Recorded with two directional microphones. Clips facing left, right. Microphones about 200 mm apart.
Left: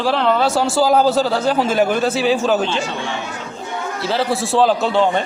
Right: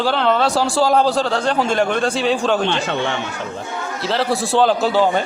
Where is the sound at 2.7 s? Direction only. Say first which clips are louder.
Right 2 dB; 65° right (ahead or behind).